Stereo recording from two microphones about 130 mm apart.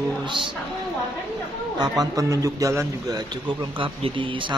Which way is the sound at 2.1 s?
25° right (ahead or behind).